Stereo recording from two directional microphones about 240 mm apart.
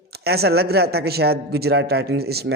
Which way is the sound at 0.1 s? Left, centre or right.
Right.